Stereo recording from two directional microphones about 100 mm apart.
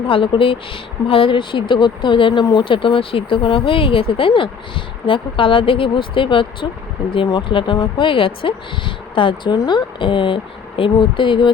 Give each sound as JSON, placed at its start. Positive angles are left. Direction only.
{"t": 0.1, "sound": "speech", "side_deg": 60}